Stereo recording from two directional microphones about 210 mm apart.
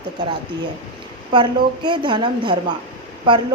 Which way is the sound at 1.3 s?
20° right (ahead or behind).